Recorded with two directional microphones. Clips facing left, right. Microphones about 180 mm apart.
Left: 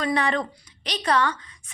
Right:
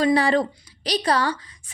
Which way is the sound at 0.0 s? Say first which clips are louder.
Right 5 dB; 30° right (ahead or behind).